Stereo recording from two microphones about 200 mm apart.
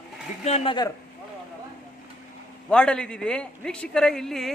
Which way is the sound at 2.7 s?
5° left (ahead or behind).